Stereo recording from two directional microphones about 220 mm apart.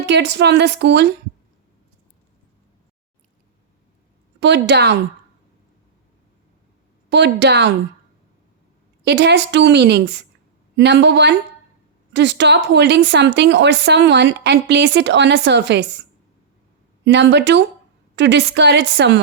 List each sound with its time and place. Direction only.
0.0 s a woman's voice: 50° right (ahead or behind)
4.4 s a woman's voice: 50° right (ahead or behind)
7.1 s a woman's voice: 50° right (ahead or behind)
9.0 s a woman's voice: 50° right (ahead or behind)
17.0 s a woman's voice: 50° right (ahead or behind)